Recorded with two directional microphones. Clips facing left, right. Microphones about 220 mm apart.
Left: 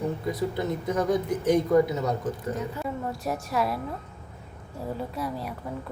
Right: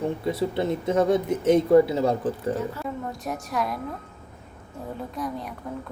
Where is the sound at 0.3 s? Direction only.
25° right (ahead or behind).